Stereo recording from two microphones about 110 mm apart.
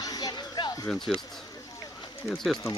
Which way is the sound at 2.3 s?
Centre (ahead or behind).